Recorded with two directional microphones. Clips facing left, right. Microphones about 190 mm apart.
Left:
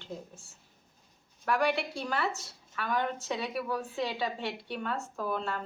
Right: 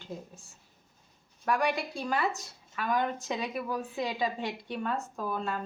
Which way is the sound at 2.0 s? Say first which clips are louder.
Right 2 dB; 15° right (ahead or behind).